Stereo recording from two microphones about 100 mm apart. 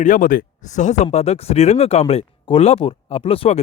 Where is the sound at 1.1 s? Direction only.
90° left.